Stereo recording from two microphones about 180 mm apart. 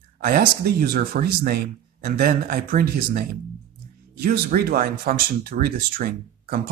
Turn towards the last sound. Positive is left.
turn(degrees=-55)  # may be behind; listen again after turning